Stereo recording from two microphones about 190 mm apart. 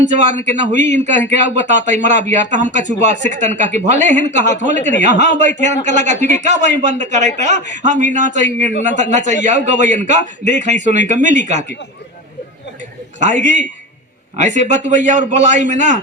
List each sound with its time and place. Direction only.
0.0 s speech: 35° right (ahead or behind)
13.1 s speech: 40° right (ahead or behind)